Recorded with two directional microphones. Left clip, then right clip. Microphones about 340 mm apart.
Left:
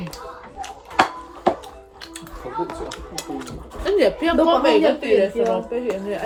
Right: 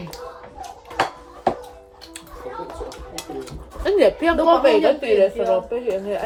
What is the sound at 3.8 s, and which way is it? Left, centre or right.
A woman's voice, centre.